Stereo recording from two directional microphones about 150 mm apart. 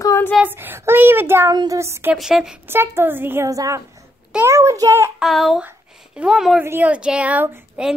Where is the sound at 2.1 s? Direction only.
5° right (ahead or behind); by 5.1 s 20° right (ahead or behind).